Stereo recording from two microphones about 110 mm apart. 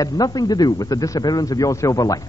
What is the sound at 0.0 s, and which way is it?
A man's voice, 35° left (ahead or behind).